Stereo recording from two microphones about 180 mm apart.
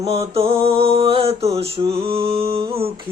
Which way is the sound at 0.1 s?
35° right (ahead or behind).